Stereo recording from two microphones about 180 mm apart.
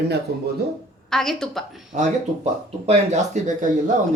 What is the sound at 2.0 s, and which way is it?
Speech, 35° right (ahead or behind).